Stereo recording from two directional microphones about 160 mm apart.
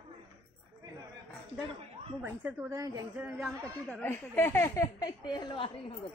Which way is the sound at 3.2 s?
5° right (ahead or behind).